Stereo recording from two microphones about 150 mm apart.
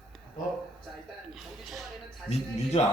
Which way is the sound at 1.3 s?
Centre (ahead or behind).